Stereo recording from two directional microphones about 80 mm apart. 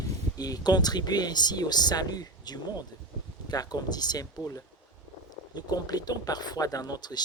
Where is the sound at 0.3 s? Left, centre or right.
Left.